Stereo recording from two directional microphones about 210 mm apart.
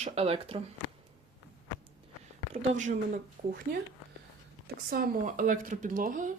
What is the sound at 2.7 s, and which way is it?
Speech, 35° right (ahead or behind).